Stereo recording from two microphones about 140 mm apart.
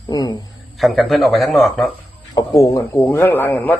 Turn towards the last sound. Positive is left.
turn(degrees=15)  # may be behind; listen again after turning